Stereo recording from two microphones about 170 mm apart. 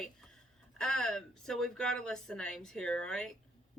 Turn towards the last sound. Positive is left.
turn(degrees=5)  # may be behind; listen again after turning